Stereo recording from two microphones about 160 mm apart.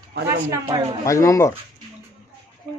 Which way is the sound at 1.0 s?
20° left (ahead or behind).